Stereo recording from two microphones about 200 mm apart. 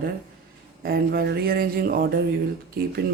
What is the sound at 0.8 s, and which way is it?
Speech, 50° right (ahead or behind).